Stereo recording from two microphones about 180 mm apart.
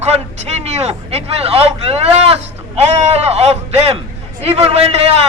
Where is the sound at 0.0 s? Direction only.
40° right (ahead or behind).